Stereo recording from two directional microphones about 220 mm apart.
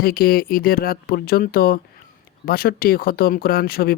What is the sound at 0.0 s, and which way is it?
Speech, 40° left (ahead or behind).